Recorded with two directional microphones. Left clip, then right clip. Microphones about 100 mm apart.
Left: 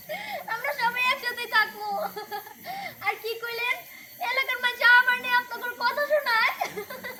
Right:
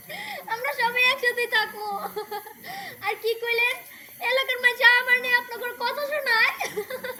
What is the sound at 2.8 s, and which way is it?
Speech, 25° left (ahead or behind).